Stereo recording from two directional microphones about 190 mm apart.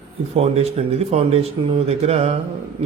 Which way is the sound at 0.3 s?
30° right (ahead or behind).